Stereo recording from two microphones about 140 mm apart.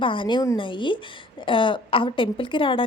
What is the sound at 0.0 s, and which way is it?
A woman's voice, 35° left (ahead or behind).